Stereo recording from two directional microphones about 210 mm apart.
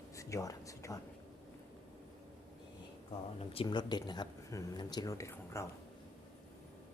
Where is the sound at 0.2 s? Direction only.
15° left (ahead or behind).